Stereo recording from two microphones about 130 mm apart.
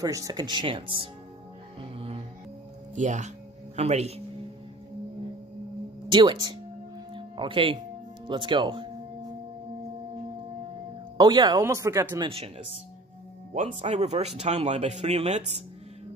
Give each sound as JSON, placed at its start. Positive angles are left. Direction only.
{"t": 0.0, "sound": "speech", "side_deg": -30}
{"t": 1.8, "sound": "music", "side_deg": -45}
{"t": 2.9, "sound": "music", "side_deg": -70}
{"t": 6.0, "sound": "speech", "side_deg": -35}
{"t": 11.1, "sound": "speech", "side_deg": -35}
{"t": 11.6, "sound": "speech", "side_deg": -20}
{"t": 12.2, "sound": "speech", "side_deg": -45}
{"t": 13.7, "sound": "speech", "side_deg": -55}